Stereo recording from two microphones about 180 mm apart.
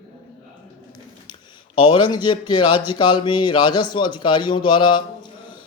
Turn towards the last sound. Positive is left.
turn(degrees=25)  # may be behind; listen again after turning